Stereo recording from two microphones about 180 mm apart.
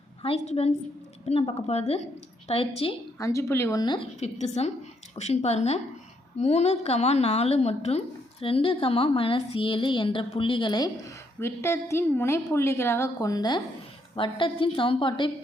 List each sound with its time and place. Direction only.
0.2 s a woman's voice: 35° left (ahead or behind)
3.2 s a woman's voice: 15° left (ahead or behind)
4.2 s a woman's voice: 40° left (ahead or behind)